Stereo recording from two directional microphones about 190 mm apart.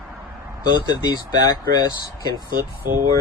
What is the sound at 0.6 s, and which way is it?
Speech, 20° left (ahead or behind).